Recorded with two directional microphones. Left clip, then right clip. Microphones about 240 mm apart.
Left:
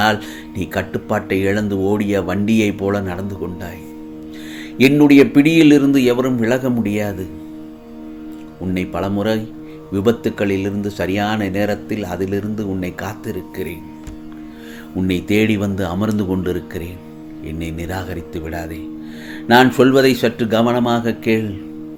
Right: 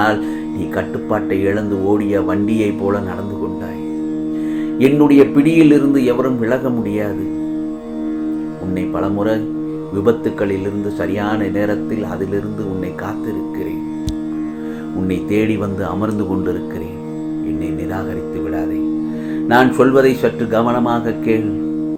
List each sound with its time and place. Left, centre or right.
0.8 s speech: left
4.8 s speech: left
8.7 s speech: left
15.0 s speech: left
19.5 s speech: left